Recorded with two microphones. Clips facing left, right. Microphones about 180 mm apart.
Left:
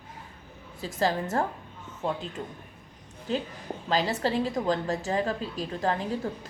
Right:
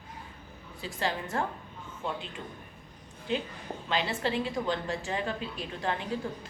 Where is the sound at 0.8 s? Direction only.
40° left (ahead or behind).